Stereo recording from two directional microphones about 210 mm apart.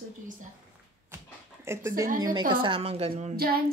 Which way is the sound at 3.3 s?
45° right (ahead or behind).